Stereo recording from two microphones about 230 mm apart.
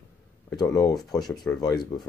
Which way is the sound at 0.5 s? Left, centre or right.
Centre.